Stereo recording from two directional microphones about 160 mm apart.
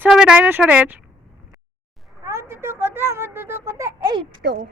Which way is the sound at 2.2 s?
20° right (ahead or behind).